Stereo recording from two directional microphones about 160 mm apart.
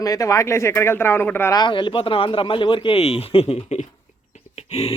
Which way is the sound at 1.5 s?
30° left (ahead or behind).